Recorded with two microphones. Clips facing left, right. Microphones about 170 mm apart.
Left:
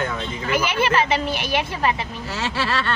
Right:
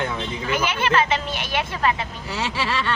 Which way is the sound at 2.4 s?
15° right (ahead or behind).